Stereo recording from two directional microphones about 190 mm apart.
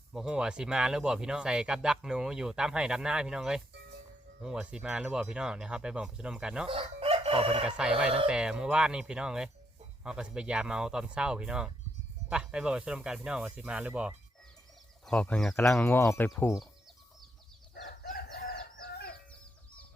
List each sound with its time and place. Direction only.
0.1 s speech: 5° right (ahead or behind)
6.7 s chicken: 30° right (ahead or behind)
7.8 s speech: 5° right (ahead or behind)
15.0 s speech: 5° left (ahead or behind)
18.1 s chicken: 55° left (ahead or behind)